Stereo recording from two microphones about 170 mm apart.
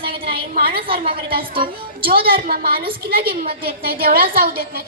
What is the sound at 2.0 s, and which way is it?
A woman's voice, 60° right (ahead or behind).